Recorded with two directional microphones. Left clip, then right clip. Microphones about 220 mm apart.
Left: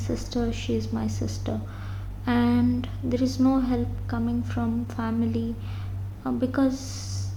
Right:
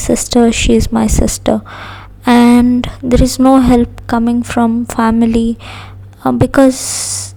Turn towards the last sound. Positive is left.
turn(degrees=-45)  # may be behind; listen again after turning